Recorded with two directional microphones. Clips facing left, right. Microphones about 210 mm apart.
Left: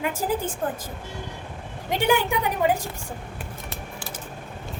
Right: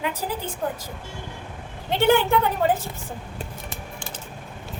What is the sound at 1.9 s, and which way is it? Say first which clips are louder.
Speech: right 3 dB; 15° left (ahead or behind).